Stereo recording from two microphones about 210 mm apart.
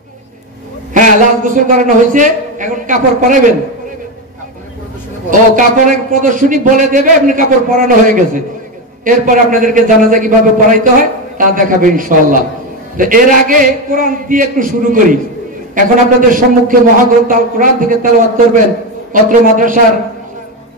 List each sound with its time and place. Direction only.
0.9 s a man's voice: 40° right (ahead or behind)
5.6 s a man's voice: 40° right (ahead or behind)